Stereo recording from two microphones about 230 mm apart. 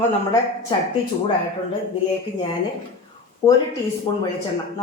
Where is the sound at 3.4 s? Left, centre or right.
Centre.